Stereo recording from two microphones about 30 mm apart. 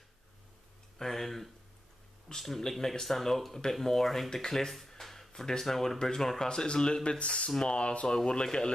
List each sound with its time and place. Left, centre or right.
0.9 s speech: centre
2.3 s speech: left
2.8 s speech: centre
4.3 s speech: centre
4.6 s a sound: centre
5.3 s speech: centre